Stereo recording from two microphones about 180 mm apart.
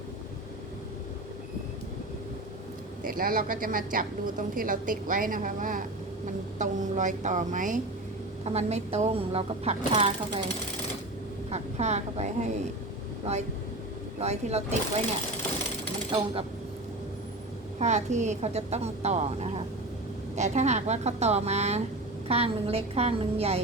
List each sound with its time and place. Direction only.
3.0 s a woman's voice: 50° right (ahead or behind); by 10.4 s 35° right (ahead or behind)
11.5 s speech: 40° right (ahead or behind)
14.2 s speech: 35° right (ahead or behind)
17.7 s speech: 40° right (ahead or behind)